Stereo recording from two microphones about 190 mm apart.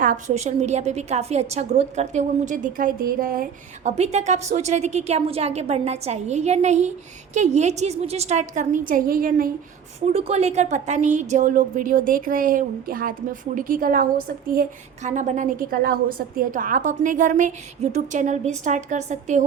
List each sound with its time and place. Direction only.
0.0 s a woman's voice: 40° right (ahead or behind)
3.8 s a woman's voice: 35° right (ahead or behind)
10.1 s a woman's voice: 35° right (ahead or behind)